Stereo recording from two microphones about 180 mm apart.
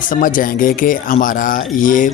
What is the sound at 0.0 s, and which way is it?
Speech, 50° left (ahead or behind).